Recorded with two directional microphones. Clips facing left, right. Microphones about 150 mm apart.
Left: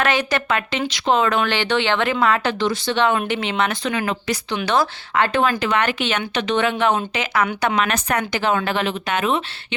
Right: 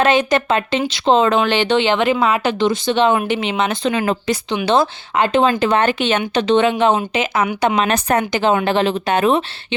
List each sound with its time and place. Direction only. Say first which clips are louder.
0.0 s speech: right 6 dB; 20° right (ahead or behind)
7.8 s speech: right 4 dB; 30° right (ahead or behind)